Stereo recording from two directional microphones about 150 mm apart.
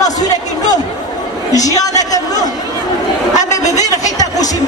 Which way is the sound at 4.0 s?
25° left (ahead or behind).